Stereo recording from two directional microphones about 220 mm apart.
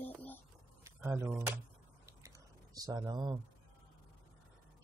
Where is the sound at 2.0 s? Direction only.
15° right (ahead or behind).